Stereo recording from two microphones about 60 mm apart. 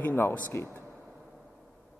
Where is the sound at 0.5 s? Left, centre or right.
Left.